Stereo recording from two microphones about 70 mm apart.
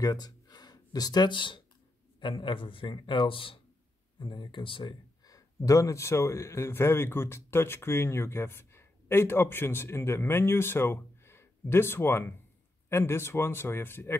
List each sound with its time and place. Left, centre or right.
0.0 s speech: left
4.2 s a man's voice: left